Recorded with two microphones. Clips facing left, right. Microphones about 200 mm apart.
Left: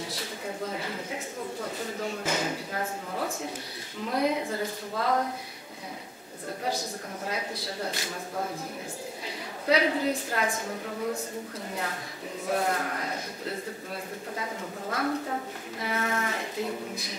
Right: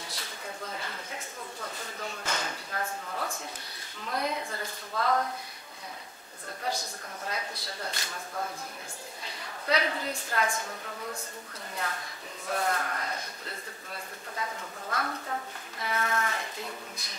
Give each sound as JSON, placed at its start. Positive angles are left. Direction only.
{"t": 0.1, "sound": "a sound", "side_deg": 10}
{"t": 4.0, "sound": "speech", "side_deg": 10}
{"t": 7.2, "sound": "a woman's voice", "side_deg": 5}
{"t": 9.7, "sound": "a woman's voice", "side_deg": 10}